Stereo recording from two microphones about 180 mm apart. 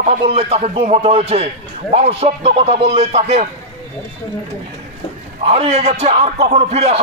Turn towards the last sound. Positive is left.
turn(degrees=-35)  # may be behind; listen again after turning